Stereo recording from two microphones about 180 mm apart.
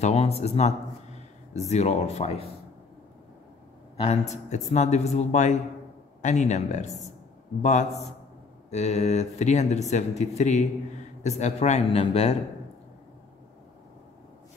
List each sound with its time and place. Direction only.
0.0 s speech: 35° left (ahead or behind)
3.9 s a sound: 35° left (ahead or behind)
4.6 s speech: 40° left (ahead or behind)